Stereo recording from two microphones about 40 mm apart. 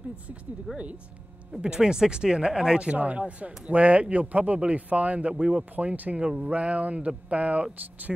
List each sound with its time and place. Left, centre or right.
0.7 s speech: right
2.9 s speech: right
5.3 s speech: right
5.8 s speech: right